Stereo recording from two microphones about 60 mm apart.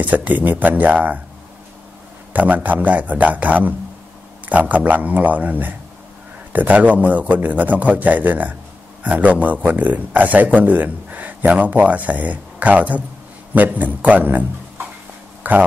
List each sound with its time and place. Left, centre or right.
0.0 s a man's voice: right
2.3 s a man's voice: right
15.4 s speech: right